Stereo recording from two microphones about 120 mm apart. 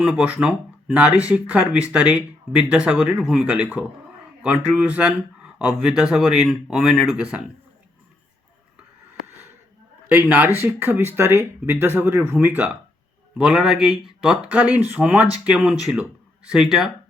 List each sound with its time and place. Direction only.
0.0 s speech: 10° right (ahead or behind)
10.1 s speech: 15° right (ahead or behind)
13.4 s speech: 5° right (ahead or behind)